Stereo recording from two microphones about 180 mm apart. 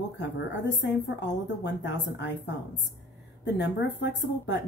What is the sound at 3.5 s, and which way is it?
Speech, 75° left (ahead or behind).